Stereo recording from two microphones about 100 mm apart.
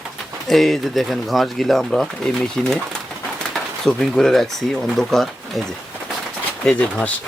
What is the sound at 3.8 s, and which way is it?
Speech, 5° left (ahead or behind).